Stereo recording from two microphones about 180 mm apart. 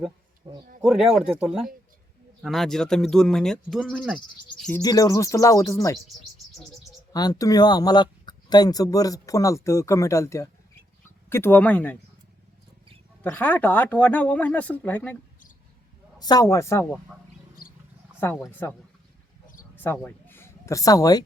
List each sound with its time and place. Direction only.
0.4 s a sound: 25° right (ahead or behind)
0.8 s speech: 5° right (ahead or behind)
4.5 s insect: centre (ahead or behind)
4.8 s speech: 20° left (ahead or behind)
7.1 s speech: 20° left (ahead or behind)
13.2 s speech: 10° left (ahead or behind)
16.1 s speech: 20° left (ahead or behind)
18.6 s speech: 15° left (ahead or behind)